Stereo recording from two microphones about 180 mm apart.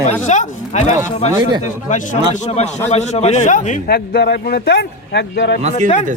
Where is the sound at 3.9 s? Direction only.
60° left (ahead or behind).